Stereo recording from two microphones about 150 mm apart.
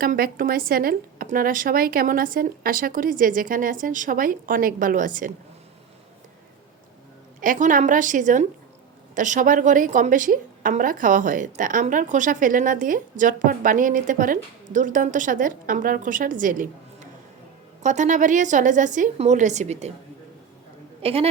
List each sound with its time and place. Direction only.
0.0 s speech: 70° right (ahead or behind)
7.4 s a woman's voice: 60° right (ahead or behind)
21.0 s a woman's voice: 40° right (ahead or behind)